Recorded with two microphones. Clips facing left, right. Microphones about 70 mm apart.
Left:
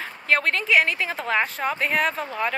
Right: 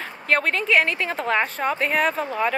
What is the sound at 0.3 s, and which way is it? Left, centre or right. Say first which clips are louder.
A woman's voice: right 1 dB; centre.